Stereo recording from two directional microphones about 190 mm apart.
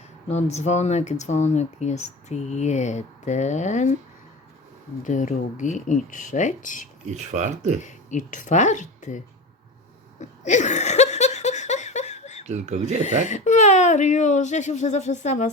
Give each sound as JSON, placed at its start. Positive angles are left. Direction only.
{"t": 0.3, "sound": "speech", "side_deg": 35}
{"t": 5.0, "sound": "speech", "side_deg": 40}
{"t": 7.0, "sound": "speech", "side_deg": -40}
{"t": 7.8, "sound": "speech", "side_deg": 40}
{"t": 10.2, "sound": "a sound", "side_deg": 40}
{"t": 12.5, "sound": "speech", "side_deg": -35}
{"t": 13.0, "sound": "speech", "side_deg": 40}